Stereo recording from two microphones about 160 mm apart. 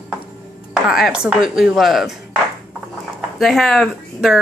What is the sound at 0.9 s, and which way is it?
Speech, 5° right (ahead or behind).